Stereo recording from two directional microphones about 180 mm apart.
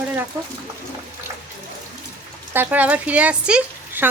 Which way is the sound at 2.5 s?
10° right (ahead or behind).